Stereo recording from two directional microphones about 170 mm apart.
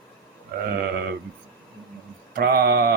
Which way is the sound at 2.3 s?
65° right (ahead or behind).